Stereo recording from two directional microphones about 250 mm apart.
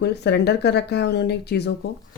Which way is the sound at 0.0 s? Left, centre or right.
Left.